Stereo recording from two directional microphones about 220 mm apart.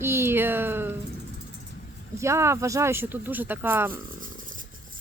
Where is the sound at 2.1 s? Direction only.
10° right (ahead or behind).